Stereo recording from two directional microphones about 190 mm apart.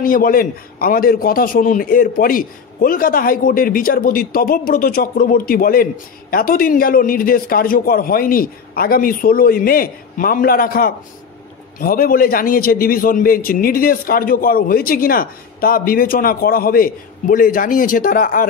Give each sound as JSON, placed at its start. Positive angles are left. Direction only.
{"t": 0.0, "sound": "a man's voice", "side_deg": 50}